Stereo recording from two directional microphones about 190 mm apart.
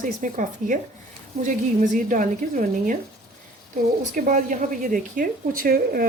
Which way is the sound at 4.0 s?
45° right (ahead or behind).